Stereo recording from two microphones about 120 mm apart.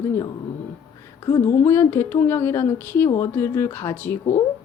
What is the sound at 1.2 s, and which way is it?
Speech, 30° left (ahead or behind).